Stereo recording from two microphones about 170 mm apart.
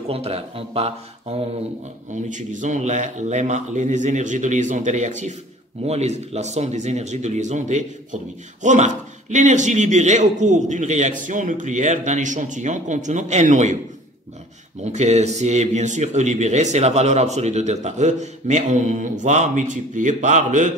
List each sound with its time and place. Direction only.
0.1 s speech: 35° right (ahead or behind)
2.2 s a man's voice: 45° right (ahead or behind)
14.8 s a man's voice: 40° right (ahead or behind)